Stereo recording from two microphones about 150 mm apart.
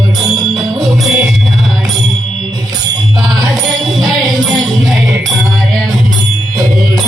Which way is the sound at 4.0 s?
25° right (ahead or behind).